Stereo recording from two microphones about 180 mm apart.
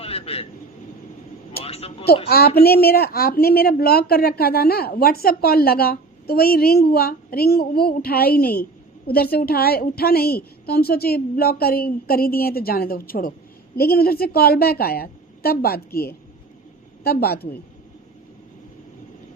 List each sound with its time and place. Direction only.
0.0 s vehicle: 35° left (ahead or behind)
1.6 s speech: 35° left (ahead or behind)
2.6 s speech: 60° left (ahead or behind)